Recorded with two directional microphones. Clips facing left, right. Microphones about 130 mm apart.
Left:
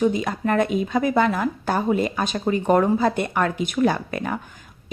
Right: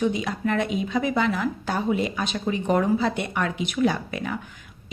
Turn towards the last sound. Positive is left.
turn(degrees=50)  # may be behind; listen again after turning